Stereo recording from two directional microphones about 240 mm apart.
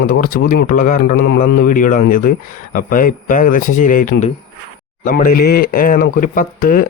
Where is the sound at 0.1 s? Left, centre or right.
Left.